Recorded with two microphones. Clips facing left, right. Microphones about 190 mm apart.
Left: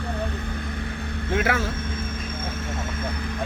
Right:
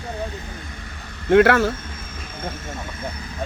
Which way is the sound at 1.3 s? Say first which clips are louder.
Right 10 dB; 70° right (ahead or behind).